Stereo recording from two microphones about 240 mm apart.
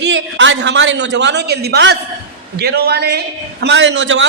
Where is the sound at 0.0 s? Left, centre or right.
Right.